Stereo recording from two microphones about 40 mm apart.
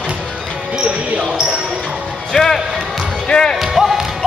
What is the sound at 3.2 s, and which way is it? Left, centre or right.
Music, left.